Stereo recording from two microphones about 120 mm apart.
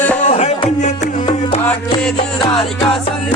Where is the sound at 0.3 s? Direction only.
65° left (ahead or behind).